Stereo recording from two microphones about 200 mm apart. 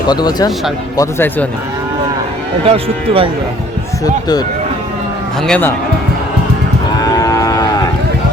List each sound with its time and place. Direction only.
0.1 s speech: 20° left (ahead or behind)
2.6 s speech: 30° right (ahead or behind)
4.0 s speech: 20° left (ahead or behind)
5.5 s speech: 10° left (ahead or behind)
7.0 s cattle: 20° left (ahead or behind)